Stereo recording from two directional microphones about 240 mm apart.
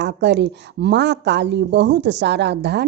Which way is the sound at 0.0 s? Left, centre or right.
Right.